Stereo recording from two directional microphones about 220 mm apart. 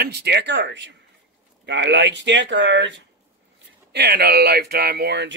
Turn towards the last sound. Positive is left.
turn(degrees=-50)  # may be behind; listen again after turning